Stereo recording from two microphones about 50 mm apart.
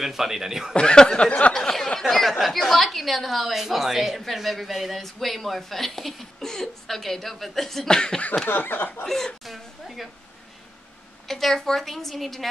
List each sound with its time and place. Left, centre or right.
0.0 s speech: centre
0.7 s speech: centre
1.5 s a sound: centre
2.0 s a woman's voice: centre
8.5 s snicker: left
9.0 s a sound: centre
11.2 s a woman's voice: centre